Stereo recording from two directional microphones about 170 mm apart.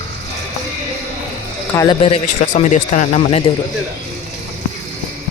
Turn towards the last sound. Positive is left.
turn(degrees=35)  # may be behind; listen again after turning